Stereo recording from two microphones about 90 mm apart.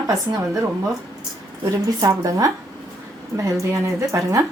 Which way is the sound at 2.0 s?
40° right (ahead or behind).